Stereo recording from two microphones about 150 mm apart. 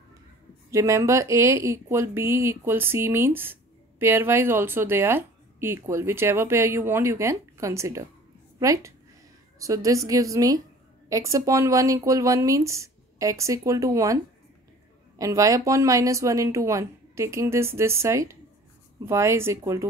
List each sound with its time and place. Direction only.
0.7 s a woman's voice: 20° right (ahead or behind)